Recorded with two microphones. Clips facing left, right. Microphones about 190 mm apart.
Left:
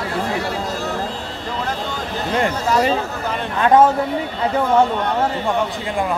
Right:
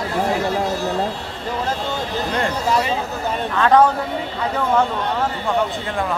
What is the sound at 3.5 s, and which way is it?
Speech, 15° left (ahead or behind).